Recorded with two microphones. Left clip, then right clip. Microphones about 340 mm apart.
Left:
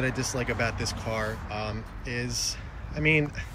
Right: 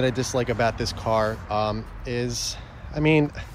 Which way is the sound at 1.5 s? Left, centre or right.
Right.